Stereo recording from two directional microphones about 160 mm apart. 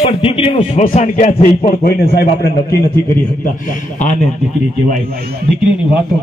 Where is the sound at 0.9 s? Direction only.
50° left (ahead or behind).